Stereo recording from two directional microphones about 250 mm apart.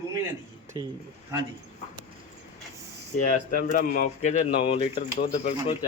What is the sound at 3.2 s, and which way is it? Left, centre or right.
Speech, left.